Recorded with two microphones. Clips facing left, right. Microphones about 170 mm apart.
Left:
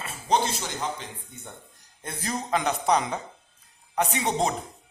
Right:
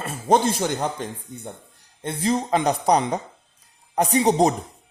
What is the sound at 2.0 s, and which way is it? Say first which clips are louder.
Speech: right 9 dB; 30° right (ahead or behind).